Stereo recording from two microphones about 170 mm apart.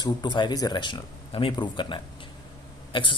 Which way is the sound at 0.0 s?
25° left (ahead or behind).